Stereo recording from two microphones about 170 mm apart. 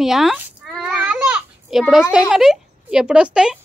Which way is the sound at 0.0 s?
Centre (ahead or behind).